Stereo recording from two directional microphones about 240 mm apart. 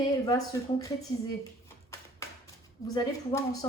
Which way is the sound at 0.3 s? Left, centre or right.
Centre.